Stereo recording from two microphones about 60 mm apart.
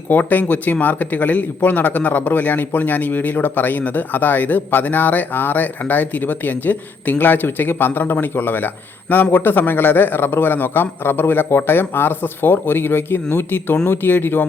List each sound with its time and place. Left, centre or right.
0.1 s speech: left